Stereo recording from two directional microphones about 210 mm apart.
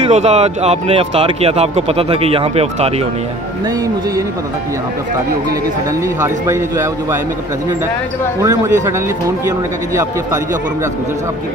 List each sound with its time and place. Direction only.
0.1 s speech: 30° right (ahead or behind)
6.2 s a man's voice: 15° right (ahead or behind)
8.4 s a man's voice: 15° right (ahead or behind)